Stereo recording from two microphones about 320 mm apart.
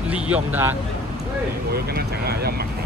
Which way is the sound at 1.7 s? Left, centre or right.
Right.